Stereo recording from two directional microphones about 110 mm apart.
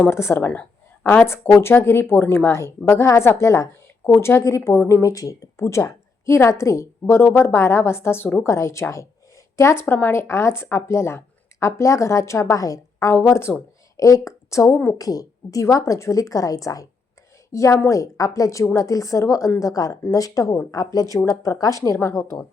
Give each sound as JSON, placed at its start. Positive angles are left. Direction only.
{"t": 0.0, "sound": "a woman's voice", "side_deg": 25}